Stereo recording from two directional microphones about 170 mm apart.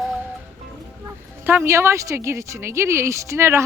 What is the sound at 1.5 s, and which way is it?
A woman's voice, 15° right (ahead or behind).